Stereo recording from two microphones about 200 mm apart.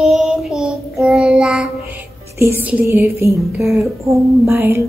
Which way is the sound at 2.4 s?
10° right (ahead or behind).